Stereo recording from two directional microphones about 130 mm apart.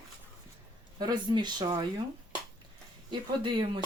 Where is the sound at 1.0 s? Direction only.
35° right (ahead or behind).